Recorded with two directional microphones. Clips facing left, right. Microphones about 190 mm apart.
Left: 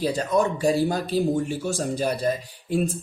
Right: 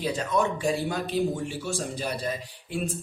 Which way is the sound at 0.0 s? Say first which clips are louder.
Left 4 dB; 40° left (ahead or behind).